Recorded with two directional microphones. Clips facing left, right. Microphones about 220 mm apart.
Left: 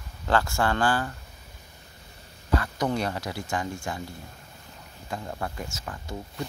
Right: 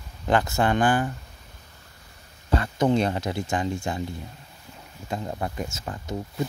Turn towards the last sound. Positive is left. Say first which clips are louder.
# right 5 dB
turn(degrees=-25)  # may be behind; listen again after turning